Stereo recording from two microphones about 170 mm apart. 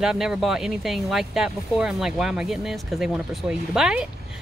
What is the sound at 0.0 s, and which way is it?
Speech, 5° right (ahead or behind).